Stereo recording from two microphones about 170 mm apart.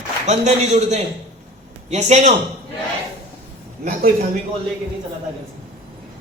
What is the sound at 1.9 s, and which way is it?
Speech, 40° right (ahead or behind).